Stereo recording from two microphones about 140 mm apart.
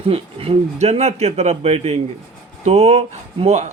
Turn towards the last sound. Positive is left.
turn(degrees=-50)  # may be behind; listen again after turning